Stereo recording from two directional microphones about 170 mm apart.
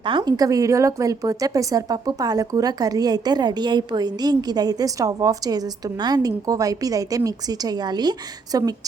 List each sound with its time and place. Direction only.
0.0 s a woman's voice: 25° right (ahead or behind)